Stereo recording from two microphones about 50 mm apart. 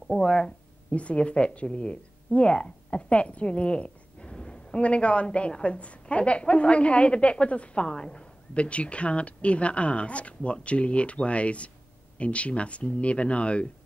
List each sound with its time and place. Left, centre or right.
0.1 s speech: centre
0.9 s a woman's voice: left